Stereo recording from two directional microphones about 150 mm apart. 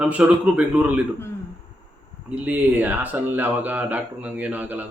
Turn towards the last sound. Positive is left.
turn(degrees=-10)  # may be behind; listen again after turning